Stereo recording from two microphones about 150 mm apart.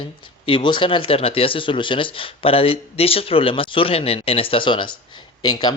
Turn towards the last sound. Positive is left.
turn(degrees=25)  # may be behind; listen again after turning